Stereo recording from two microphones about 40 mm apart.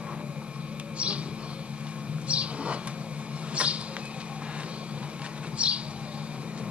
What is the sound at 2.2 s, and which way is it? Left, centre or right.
Vehicle, right.